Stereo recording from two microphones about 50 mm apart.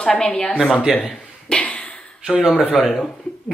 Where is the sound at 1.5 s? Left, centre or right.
Left.